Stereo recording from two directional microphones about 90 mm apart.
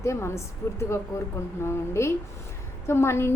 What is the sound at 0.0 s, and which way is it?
A woman's voice, 30° left (ahead or behind).